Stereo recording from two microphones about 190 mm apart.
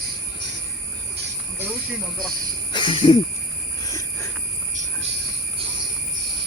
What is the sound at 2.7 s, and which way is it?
Jingle bell, 25° left (ahead or behind).